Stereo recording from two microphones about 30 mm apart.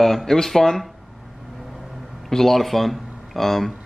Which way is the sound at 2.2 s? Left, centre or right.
Centre.